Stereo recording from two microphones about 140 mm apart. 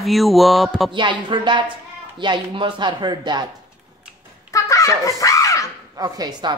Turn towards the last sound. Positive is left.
turn(degrees=-30)  # may be behind; listen again after turning